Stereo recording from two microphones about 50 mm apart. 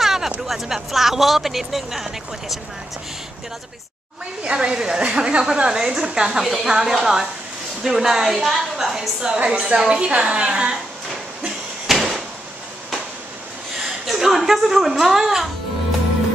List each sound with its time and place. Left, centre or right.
0.0 s a sound: centre
0.5 s speech: centre
4.5 s a woman's voice: centre
9.4 s a woman's voice: right
11.9 s a sound: centre
14.0 s speech: centre